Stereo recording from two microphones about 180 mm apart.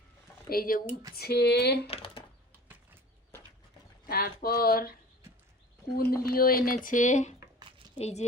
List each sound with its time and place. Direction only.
0.4 s speech: 55° left (ahead or behind)
1.1 s a sound: 60° left (ahead or behind)
1.9 s typing: 30° left (ahead or behind)
4.0 s speech: 55° left (ahead or behind); by 8.2 s 35° left (ahead or behind)